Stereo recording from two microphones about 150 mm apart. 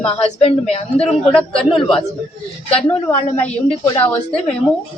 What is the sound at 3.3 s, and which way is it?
Speech, 10° left (ahead or behind).